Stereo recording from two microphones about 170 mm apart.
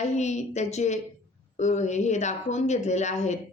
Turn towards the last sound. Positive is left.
turn(degrees=45)  # may be behind; listen again after turning